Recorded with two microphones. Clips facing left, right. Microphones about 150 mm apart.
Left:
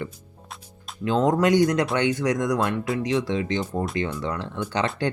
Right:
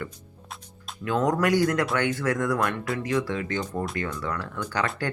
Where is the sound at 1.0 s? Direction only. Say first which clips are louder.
Left 3 dB; 25° left (ahead or behind).